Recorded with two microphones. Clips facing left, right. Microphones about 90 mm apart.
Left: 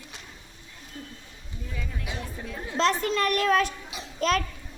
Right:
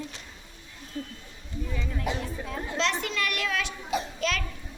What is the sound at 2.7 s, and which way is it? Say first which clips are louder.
A child's voice: left 5 dB; 40° left (ahead or behind).